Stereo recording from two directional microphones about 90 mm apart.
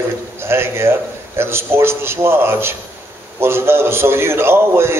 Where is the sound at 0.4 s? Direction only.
25° right (ahead or behind).